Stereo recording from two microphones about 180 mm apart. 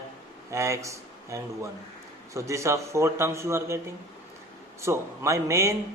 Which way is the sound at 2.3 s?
15° right (ahead or behind).